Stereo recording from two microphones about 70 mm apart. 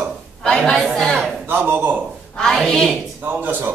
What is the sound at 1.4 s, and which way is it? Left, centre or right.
Speech, right.